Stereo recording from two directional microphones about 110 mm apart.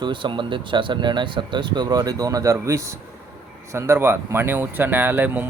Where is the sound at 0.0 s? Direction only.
45° right (ahead or behind).